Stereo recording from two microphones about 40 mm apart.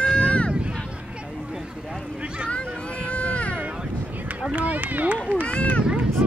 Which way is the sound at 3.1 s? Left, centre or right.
Left.